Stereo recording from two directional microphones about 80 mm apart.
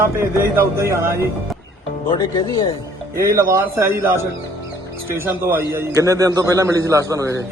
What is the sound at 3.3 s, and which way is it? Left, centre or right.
Speech, right.